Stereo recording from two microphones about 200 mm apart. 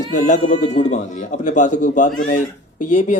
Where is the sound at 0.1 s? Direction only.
35° left (ahead or behind).